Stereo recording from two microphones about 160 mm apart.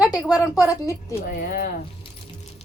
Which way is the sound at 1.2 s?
70° left (ahead or behind).